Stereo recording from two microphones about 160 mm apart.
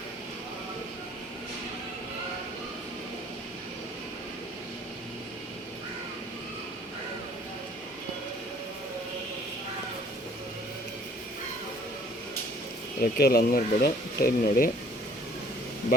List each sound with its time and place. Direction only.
13.0 s speech: 70° left (ahead or behind)